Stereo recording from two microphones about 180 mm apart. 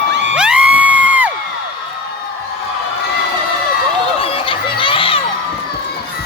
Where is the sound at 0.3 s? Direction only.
5° right (ahead or behind).